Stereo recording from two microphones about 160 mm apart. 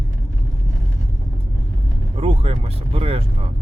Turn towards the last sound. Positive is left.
turn(degrees=-40)  # may be behind; listen again after turning